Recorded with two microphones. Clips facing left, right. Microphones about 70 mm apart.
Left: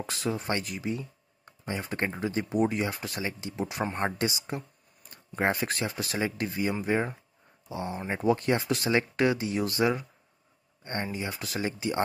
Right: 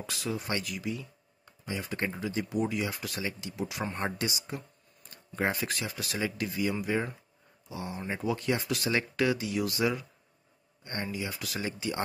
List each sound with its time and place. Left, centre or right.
0.0 s speech: left